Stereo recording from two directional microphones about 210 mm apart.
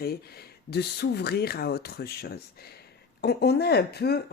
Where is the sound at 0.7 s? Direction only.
50° left (ahead or behind).